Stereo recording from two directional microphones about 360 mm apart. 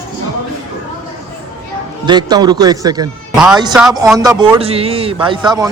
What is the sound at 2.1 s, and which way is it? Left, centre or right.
A man's voice, centre.